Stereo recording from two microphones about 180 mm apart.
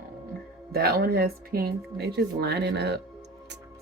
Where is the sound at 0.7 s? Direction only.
60° right (ahead or behind).